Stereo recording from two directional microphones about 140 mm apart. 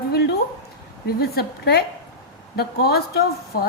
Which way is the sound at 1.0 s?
90° left.